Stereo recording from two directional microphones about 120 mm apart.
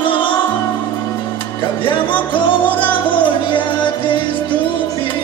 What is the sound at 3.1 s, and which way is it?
Music, 45° left (ahead or behind).